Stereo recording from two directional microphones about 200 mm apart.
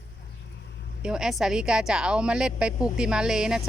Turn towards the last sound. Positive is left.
turn(degrees=-5)  # may be behind; listen again after turning